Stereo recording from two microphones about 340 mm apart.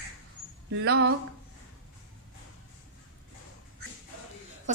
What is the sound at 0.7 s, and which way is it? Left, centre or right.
Speech, right.